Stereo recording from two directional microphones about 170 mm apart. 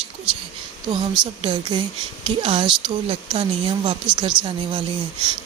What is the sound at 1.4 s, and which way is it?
Speech, 30° right (ahead or behind).